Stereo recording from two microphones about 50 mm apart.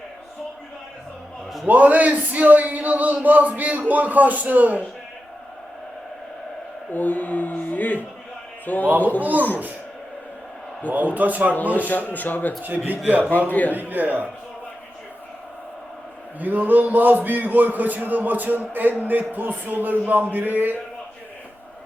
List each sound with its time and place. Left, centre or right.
1.6 s a man's voice: right
6.9 s a man's voice: left
10.9 s a man's voice: right
11.9 s speech: left
12.6 s a man's voice: right
13.5 s speech: left
13.7 s a man's voice: right
16.4 s a man's voice: right